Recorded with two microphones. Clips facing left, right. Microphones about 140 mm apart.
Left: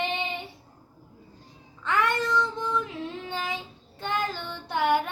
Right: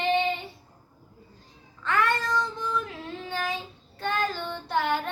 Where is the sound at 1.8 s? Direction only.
20° left (ahead or behind).